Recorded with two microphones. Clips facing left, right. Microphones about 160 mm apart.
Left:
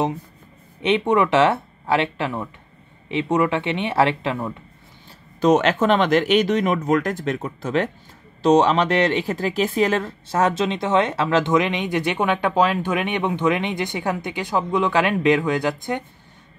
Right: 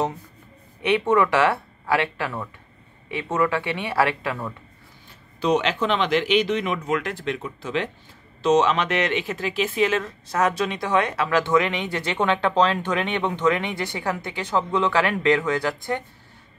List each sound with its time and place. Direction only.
0.8 s speech: 20° left (ahead or behind)
5.4 s speech: 50° left (ahead or behind)
8.4 s speech: 35° left (ahead or behind); by 16.0 s 20° left (ahead or behind)